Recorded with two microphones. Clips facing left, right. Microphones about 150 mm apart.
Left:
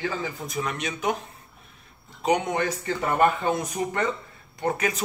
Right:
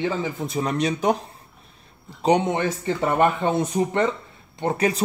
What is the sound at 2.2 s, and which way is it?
A man's voice, 25° right (ahead or behind).